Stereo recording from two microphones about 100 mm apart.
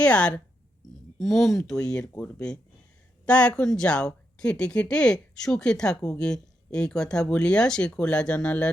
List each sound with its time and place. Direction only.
0.0 s speech: 10° left (ahead or behind)